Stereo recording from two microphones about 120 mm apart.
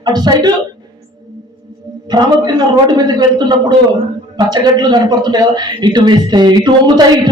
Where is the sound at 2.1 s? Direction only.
35° right (ahead or behind).